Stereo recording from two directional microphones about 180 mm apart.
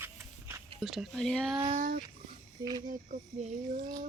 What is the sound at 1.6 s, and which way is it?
Female singing, 45° right (ahead or behind).